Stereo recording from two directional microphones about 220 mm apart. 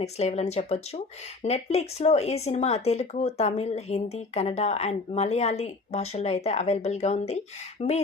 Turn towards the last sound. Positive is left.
turn(degrees=30)  # may be behind; listen again after turning